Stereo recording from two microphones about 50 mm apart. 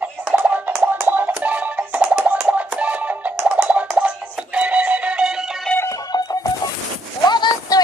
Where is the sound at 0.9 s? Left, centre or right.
Right.